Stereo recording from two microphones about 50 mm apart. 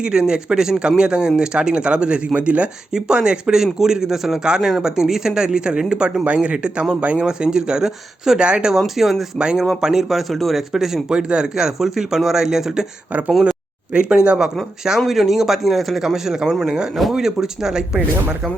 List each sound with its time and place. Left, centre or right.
0.0 s a man's voice: centre
7.3 s a man's voice: centre
8.4 s speech: right
9.0 s speech: centre
9.4 s a man's voice: centre
13.9 s a man's voice: centre